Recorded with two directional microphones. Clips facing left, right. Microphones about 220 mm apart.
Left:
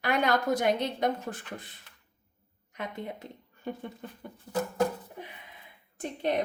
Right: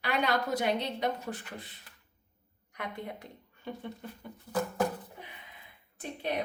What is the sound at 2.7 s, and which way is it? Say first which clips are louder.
Speech: left 2 dB; 25° left (ahead or behind).